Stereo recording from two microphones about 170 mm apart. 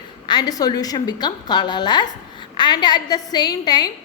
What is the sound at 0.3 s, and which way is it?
A woman's voice, 25° left (ahead or behind).